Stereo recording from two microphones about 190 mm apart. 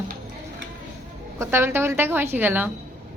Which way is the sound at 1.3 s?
15° right (ahead or behind).